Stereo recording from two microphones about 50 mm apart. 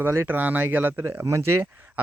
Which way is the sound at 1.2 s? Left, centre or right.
Right.